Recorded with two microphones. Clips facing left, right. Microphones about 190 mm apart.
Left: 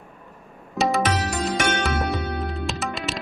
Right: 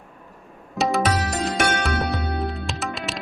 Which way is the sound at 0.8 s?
Centre (ahead or behind).